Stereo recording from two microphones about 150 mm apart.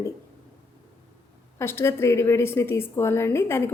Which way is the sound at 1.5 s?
15° left (ahead or behind).